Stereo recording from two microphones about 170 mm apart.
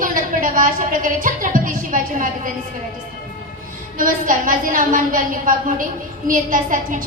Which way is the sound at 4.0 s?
50° right (ahead or behind).